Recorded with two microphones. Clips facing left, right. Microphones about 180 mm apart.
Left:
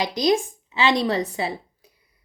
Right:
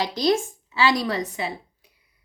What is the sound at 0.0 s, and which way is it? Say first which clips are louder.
A woman's voice: left 1 dB; 15° left (ahead or behind).